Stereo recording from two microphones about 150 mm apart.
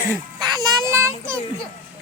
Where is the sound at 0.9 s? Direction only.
20° right (ahead or behind).